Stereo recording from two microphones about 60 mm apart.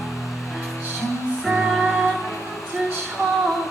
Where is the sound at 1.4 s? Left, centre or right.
Centre.